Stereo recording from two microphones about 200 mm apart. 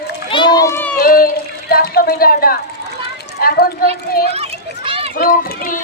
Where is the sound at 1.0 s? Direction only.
50° left (ahead or behind).